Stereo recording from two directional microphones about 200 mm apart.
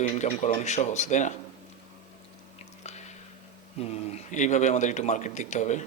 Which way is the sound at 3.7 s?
35° left (ahead or behind).